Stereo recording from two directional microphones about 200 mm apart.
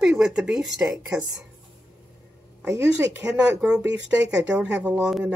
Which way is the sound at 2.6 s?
10° right (ahead or behind).